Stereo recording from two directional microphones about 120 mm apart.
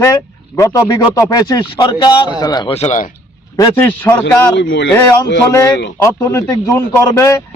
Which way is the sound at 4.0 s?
15° left (ahead or behind).